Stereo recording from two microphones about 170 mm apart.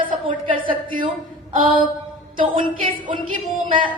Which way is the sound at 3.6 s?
30° right (ahead or behind).